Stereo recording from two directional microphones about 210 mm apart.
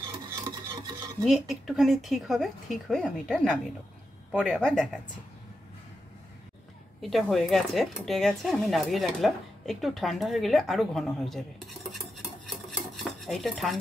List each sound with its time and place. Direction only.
0.4 s filing: 15° right (ahead or behind)
1.5 s speech: centre (ahead or behind)
7.0 s speech: centre (ahead or behind)
12.6 s dishes: centre (ahead or behind)